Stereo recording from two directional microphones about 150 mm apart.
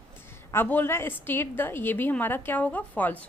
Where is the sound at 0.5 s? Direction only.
15° left (ahead or behind).